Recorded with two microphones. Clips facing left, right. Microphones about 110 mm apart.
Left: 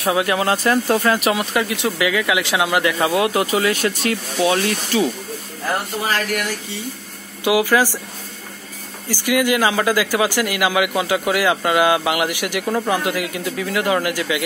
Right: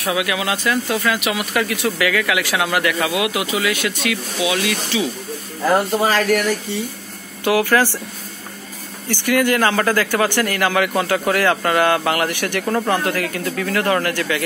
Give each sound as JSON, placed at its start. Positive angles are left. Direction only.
{"t": 0.0, "sound": "speech", "side_deg": 35}
{"t": 7.4, "sound": "speech", "side_deg": 15}
{"t": 9.1, "sound": "speech", "side_deg": 10}